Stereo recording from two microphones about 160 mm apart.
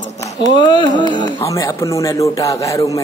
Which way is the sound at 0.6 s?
30° left (ahead or behind).